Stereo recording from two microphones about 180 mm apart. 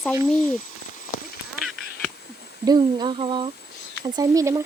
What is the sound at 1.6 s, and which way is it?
Duck, centre (ahead or behind).